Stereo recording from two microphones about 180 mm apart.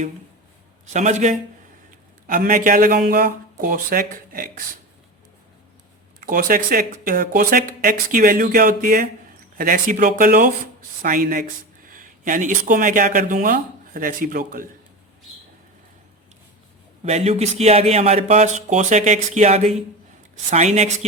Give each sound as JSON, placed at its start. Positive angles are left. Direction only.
{"t": 0.9, "sound": "speech", "side_deg": -40}
{"t": 6.1, "sound": "speech", "side_deg": -50}
{"t": 17.0, "sound": "speech", "side_deg": -35}